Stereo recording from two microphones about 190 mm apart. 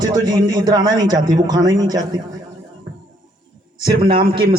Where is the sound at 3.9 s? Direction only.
25° right (ahead or behind).